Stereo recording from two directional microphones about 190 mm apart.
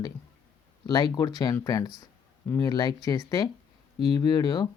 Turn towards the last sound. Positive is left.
turn(degrees=20)  # may be behind; listen again after turning